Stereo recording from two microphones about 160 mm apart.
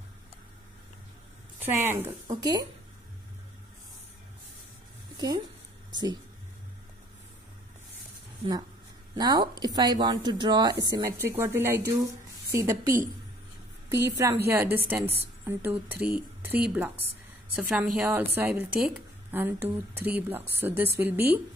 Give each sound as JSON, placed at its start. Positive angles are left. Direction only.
{"t": 1.6, "sound": "a woman's voice", "side_deg": -15}
{"t": 2.2, "sound": "a woman's voice", "side_deg": -25}
{"t": 5.1, "sound": "a sound", "side_deg": -25}
{"t": 9.1, "sound": "a woman's voice", "side_deg": -25}